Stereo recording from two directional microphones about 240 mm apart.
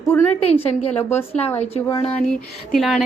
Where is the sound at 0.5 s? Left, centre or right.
Left.